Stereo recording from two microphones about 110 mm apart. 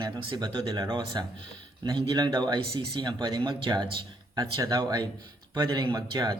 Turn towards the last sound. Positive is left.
turn(degrees=-35)  # may be behind; listen again after turning